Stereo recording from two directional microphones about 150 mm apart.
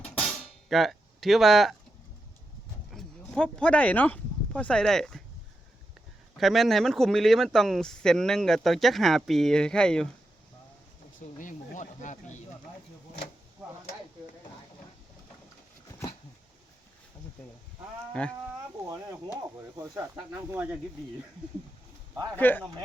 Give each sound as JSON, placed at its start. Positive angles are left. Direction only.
{"t": 0.2, "sound": "music", "side_deg": 5}
{"t": 2.9, "sound": "speech", "side_deg": 5}
{"t": 6.3, "sound": "speech", "side_deg": 0}
{"t": 11.3, "sound": "speech", "side_deg": 60}
{"t": 18.1, "sound": "speech", "side_deg": 5}
{"t": 18.9, "sound": "speech", "side_deg": -20}
{"t": 20.5, "sound": "speech", "side_deg": -10}
{"t": 22.4, "sound": "speech", "side_deg": 10}